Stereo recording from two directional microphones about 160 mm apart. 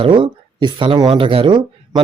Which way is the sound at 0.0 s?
30° right (ahead or behind).